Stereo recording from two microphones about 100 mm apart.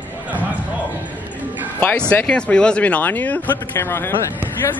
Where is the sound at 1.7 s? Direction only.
15° left (ahead or behind).